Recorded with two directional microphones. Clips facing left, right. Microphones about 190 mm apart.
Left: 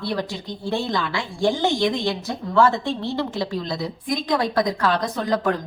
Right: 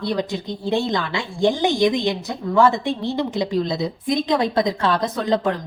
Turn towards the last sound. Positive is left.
turn(degrees=-25)  # may be behind; listen again after turning